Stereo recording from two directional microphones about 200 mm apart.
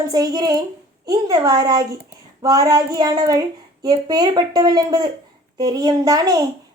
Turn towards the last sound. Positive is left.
turn(degrees=-20)  # may be behind; listen again after turning